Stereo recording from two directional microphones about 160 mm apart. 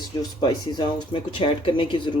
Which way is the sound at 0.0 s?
25° left (ahead or behind).